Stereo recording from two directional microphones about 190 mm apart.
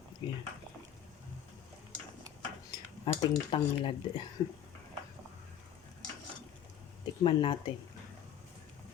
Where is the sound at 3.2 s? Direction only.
25° left (ahead or behind).